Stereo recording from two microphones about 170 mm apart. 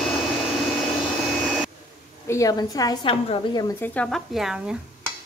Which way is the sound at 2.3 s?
20° left (ahead or behind).